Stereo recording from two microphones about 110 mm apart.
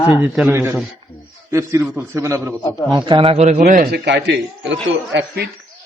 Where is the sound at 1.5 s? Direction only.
25° right (ahead or behind).